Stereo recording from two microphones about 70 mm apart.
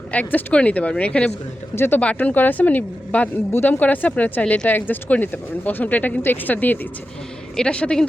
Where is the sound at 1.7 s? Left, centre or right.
Left.